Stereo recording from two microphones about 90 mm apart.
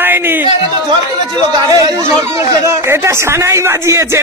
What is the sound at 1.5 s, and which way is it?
Speech, 45° right (ahead or behind).